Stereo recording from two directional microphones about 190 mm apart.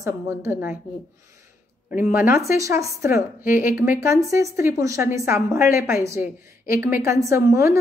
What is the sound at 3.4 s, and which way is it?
Speech, 50° left (ahead or behind).